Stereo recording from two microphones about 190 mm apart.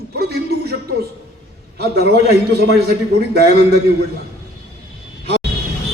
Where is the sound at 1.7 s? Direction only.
55° right (ahead or behind).